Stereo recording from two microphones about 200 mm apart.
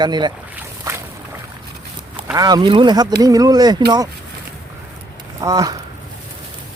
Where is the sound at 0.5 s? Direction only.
15° right (ahead or behind).